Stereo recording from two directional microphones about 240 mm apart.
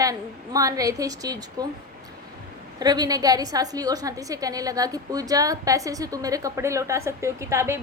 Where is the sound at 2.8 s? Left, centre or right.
Centre.